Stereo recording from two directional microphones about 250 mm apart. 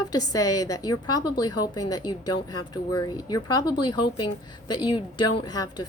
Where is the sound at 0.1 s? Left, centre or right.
Centre.